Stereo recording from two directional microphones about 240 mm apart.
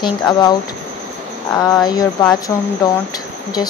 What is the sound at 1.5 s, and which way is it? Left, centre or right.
Speech, centre.